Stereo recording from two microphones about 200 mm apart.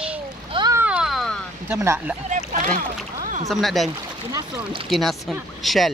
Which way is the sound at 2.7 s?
40° right (ahead or behind).